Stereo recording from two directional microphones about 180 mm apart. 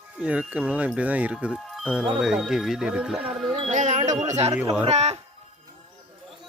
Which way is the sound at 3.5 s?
40° right (ahead or behind).